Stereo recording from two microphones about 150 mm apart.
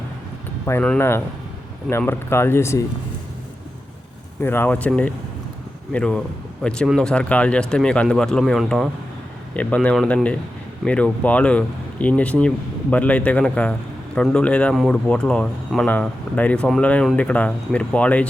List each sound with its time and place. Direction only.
0.6 s speech: 10° left (ahead or behind)
4.4 s speech: 15° left (ahead or behind)